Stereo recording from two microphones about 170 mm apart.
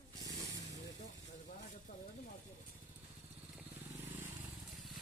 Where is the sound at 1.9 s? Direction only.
55° left (ahead or behind).